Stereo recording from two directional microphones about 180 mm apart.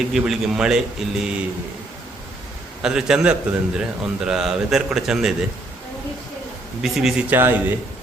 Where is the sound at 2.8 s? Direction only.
5° right (ahead or behind).